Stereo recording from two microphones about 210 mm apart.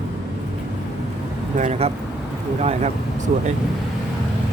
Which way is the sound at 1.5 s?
35° right (ahead or behind).